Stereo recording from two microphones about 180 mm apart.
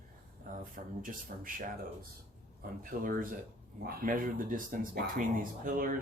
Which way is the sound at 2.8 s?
50° right (ahead or behind).